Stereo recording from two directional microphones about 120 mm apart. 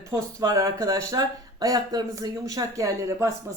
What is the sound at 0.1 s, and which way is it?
A woman's voice, 30° right (ahead or behind).